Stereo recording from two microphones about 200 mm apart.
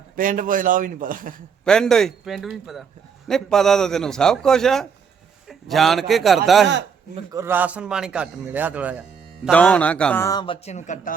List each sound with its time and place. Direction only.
0.2 s speech: 40° right (ahead or behind)
1.6 s speech: 5° left (ahead or behind)
7.3 s speech: 10° right (ahead or behind)
9.5 s speech: 5° left (ahead or behind)
10.2 s speech: 25° left (ahead or behind); by 11.1 s 40° left (ahead or behind)